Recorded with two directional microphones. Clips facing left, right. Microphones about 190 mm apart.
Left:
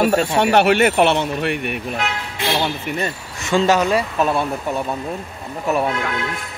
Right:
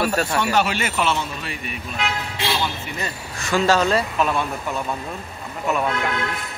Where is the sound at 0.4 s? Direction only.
60° left (ahead or behind).